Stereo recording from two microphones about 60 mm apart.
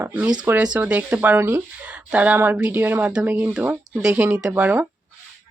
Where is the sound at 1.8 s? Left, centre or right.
Right.